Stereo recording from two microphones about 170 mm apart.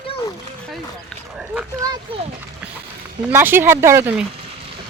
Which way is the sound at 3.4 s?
10° right (ahead or behind).